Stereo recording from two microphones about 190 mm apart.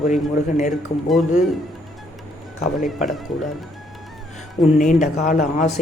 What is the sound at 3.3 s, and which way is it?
Speech, centre (ahead or behind).